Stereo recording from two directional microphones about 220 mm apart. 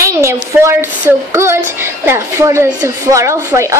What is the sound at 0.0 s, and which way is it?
Speech, 15° right (ahead or behind).